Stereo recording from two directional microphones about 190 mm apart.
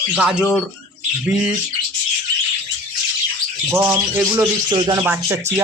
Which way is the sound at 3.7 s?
10° right (ahead or behind).